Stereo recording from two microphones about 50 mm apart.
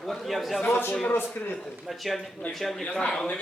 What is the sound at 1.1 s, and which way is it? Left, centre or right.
Speech, left.